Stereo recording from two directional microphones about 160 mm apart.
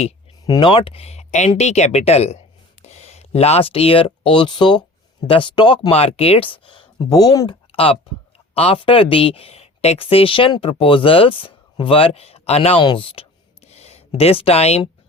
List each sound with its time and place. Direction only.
0.4 s speech: 25° left (ahead or behind)
7.7 s speech: 35° left (ahead or behind)
13.7 s a sound: 40° left (ahead or behind)